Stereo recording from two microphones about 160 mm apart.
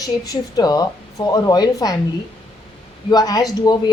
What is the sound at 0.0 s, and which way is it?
Speech, 25° left (ahead or behind).